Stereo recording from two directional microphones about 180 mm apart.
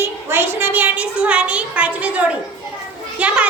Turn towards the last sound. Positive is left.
turn(degrees=-5)  # may be behind; listen again after turning